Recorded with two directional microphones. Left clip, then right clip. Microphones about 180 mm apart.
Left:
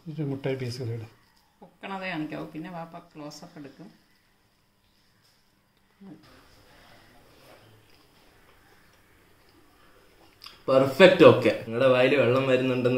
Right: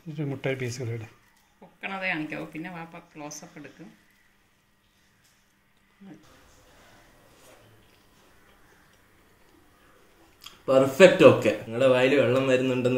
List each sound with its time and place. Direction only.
0.1 s speech: 10° right (ahead or behind)
1.8 s speech: 35° left (ahead or behind)
10.4 s speech: centre (ahead or behind)